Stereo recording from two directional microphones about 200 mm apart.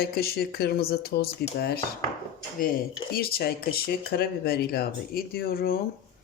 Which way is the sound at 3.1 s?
50° left (ahead or behind).